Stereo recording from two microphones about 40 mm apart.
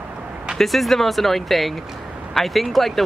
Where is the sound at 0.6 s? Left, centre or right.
Centre.